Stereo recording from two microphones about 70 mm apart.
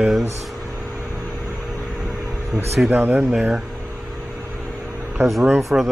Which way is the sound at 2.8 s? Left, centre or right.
Right.